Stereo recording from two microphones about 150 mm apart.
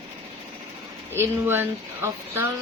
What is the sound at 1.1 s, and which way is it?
Speech, 15° right (ahead or behind).